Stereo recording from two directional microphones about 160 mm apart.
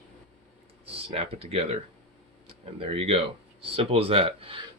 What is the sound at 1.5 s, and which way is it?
Speech, 40° right (ahead or behind).